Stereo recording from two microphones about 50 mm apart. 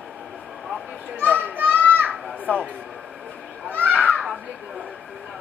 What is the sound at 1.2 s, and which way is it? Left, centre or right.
Children playing, left.